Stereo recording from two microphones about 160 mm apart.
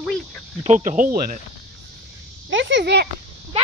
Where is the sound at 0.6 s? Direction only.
50° right (ahead or behind).